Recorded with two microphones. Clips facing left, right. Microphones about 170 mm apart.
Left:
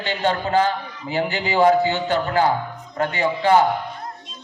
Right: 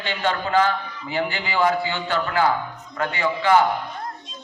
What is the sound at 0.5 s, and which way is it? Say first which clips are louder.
Speech: left 1 dB; 25° left (ahead or behind).